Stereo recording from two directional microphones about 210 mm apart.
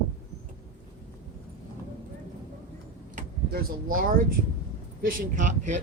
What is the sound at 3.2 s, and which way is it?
A man's voice, 45° right (ahead or behind).